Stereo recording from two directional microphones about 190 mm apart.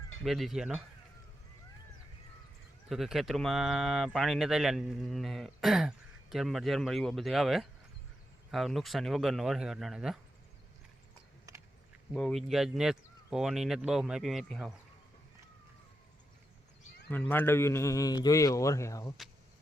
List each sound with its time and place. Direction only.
0.3 s speech: centre (ahead or behind)
2.9 s speech: centre (ahead or behind)
11.5 s a sound: 15° right (ahead or behind)
12.1 s speech: centre (ahead or behind)
17.1 s a man's voice: 10° left (ahead or behind)